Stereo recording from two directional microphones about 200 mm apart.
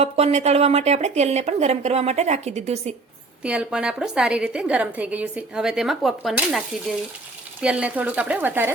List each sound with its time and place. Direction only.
0.0 s speech: 30° right (ahead or behind)
3.4 s a woman's voice: 5° right (ahead or behind)